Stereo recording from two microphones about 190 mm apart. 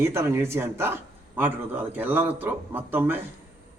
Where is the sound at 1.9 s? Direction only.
10° right (ahead or behind).